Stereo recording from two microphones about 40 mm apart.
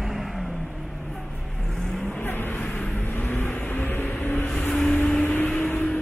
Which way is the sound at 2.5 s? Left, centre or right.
Left.